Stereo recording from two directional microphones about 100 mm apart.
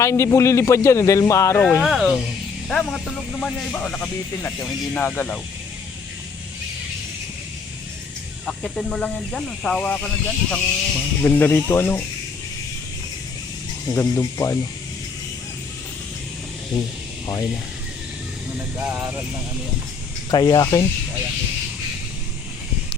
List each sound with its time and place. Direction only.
0.0 s speech: 30° left (ahead or behind)
1.8 s speech: centre (ahead or behind); by 5.4 s 15° left (ahead or behind)
8.4 s speech: centre (ahead or behind); by 12.0 s 20° left (ahead or behind)
13.8 s speech: 30° left (ahead or behind)
18.5 s speech: 15° right (ahead or behind)
20.3 s speech: 45° left (ahead or behind)